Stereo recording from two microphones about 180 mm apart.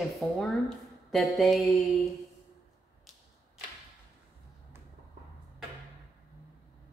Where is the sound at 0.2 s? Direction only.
5° left (ahead or behind).